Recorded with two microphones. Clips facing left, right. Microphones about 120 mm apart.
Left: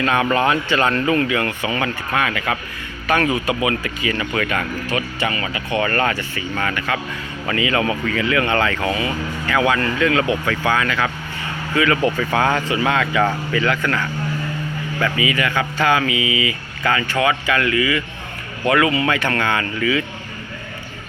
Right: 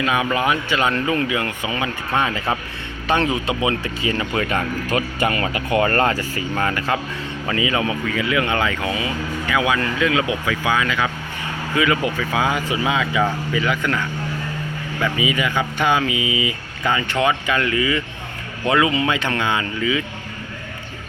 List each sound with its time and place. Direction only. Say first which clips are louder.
0.0 s speech: left 2 dB; 10° right (ahead or behind)
2.1 s speech: right 1 dB; 25° right (ahead or behind)
7.4 s speech: left 2 dB; 20° right (ahead or behind)